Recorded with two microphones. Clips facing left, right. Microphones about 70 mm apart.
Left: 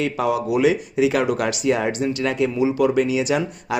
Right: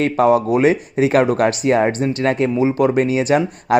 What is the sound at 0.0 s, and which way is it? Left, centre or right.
Speech, right.